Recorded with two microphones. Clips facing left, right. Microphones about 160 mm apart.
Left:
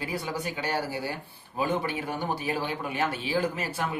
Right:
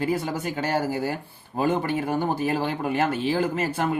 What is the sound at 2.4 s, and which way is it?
Speech, 50° right (ahead or behind).